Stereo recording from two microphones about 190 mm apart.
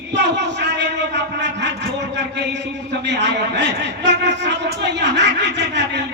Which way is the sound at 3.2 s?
70° right (ahead or behind).